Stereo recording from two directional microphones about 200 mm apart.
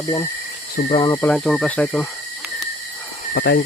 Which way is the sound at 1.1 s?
10° left (ahead or behind).